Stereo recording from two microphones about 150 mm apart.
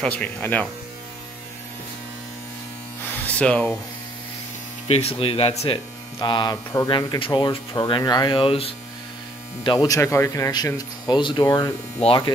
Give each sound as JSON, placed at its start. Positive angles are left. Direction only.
{"t": 0.0, "sound": "speech", "side_deg": 10}
{"t": 3.3, "sound": "speech", "side_deg": 10}
{"t": 4.8, "sound": "speech", "side_deg": 45}
{"t": 6.1, "sound": "speech", "side_deg": 30}
{"t": 9.9, "sound": "speech", "side_deg": 20}
{"t": 12.0, "sound": "speech", "side_deg": 35}